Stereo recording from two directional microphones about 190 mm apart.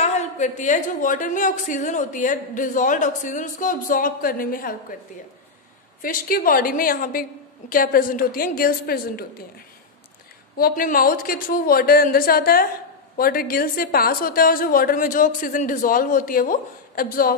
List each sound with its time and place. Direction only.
0.0 s a woman's voice: 40° left (ahead or behind)
6.0 s a woman's voice: 50° left (ahead or behind)
10.6 s a woman's voice: 50° left (ahead or behind)